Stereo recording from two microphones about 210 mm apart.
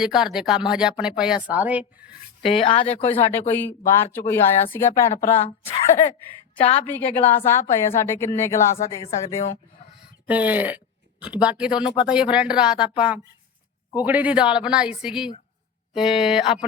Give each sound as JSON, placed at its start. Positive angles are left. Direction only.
{"t": 0.0, "sound": "speech", "side_deg": 0}
{"t": 2.4, "sound": "speech", "side_deg": 25}
{"t": 3.5, "sound": "a woman's voice", "side_deg": 10}
{"t": 5.1, "sound": "speech", "side_deg": 35}
{"t": 6.6, "sound": "speech", "side_deg": 30}
{"t": 6.8, "sound": "a woman's voice", "side_deg": 10}
{"t": 9.0, "sound": "speech", "side_deg": 35}
{"t": 10.2, "sound": "speech", "side_deg": -5}
{"t": 13.9, "sound": "speech", "side_deg": -10}